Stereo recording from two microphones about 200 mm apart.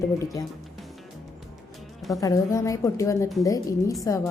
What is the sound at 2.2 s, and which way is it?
A woman's voice, 15° left (ahead or behind).